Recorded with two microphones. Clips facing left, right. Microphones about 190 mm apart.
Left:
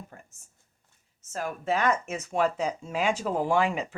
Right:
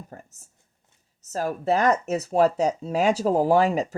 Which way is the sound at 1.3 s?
35° right (ahead or behind).